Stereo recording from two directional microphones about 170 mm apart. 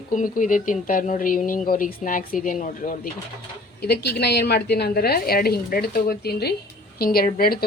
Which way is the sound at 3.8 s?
75° left (ahead or behind).